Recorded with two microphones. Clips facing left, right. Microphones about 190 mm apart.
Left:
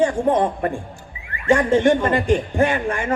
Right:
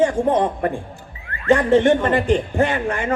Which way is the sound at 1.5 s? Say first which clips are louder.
Right 1 dB; 20° right (ahead or behind).